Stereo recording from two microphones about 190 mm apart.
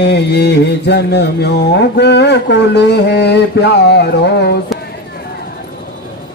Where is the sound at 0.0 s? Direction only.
60° left (ahead or behind).